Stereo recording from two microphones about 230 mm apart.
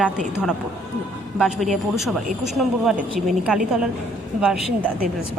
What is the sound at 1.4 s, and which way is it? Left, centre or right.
A woman's voice, centre.